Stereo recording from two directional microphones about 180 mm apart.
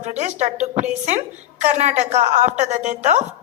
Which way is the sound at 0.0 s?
40° right (ahead or behind).